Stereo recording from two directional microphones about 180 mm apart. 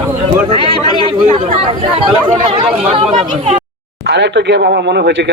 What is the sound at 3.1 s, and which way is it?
Speech, 40° right (ahead or behind).